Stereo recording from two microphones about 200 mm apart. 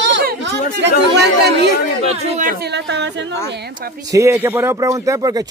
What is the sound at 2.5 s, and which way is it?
Speech, 55° right (ahead or behind).